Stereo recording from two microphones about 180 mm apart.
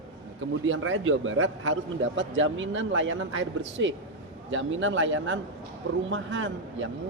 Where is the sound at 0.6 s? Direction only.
90° right.